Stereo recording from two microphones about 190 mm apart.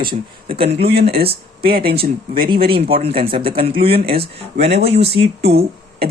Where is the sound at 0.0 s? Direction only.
25° right (ahead or behind).